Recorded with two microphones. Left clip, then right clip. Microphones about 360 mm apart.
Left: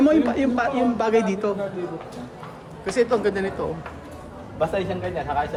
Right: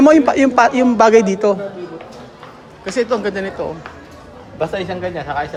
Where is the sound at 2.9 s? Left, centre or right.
Centre.